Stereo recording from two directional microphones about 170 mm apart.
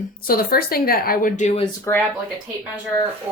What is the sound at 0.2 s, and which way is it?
A woman's voice, 60° left (ahead or behind).